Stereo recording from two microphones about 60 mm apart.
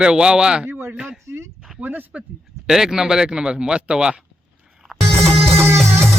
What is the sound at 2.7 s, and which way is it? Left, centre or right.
Speech, centre.